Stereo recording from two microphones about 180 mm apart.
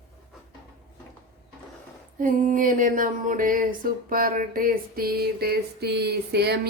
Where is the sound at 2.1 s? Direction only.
50° right (ahead or behind); by 6.6 s 65° right (ahead or behind).